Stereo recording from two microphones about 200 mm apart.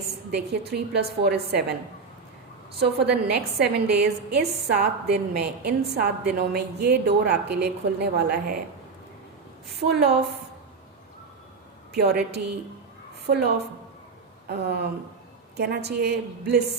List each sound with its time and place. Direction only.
0.3 s a woman's voice: 55° right (ahead or behind)
2.7 s a woman's voice: 55° right (ahead or behind)
9.8 s a woman's voice: 55° right (ahead or behind)
11.9 s a woman's voice: 55° right (ahead or behind)